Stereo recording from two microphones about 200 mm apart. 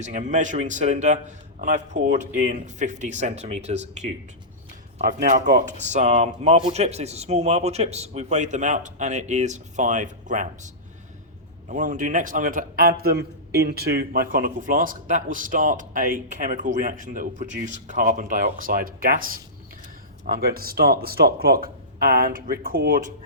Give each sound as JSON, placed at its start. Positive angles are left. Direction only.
{"t": 0.1, "sound": "speech", "side_deg": -40}
{"t": 11.7, "sound": "speech", "side_deg": -40}